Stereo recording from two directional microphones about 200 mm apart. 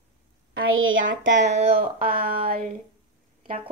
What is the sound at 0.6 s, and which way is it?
Speech, 85° right.